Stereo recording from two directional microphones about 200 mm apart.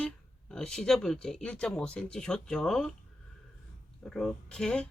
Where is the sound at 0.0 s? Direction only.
5° left (ahead or behind).